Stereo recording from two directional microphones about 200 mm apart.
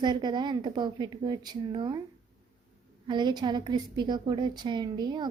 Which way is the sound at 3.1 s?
20° right (ahead or behind).